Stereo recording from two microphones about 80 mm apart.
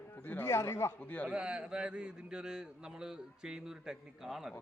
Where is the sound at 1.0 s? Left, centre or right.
Centre.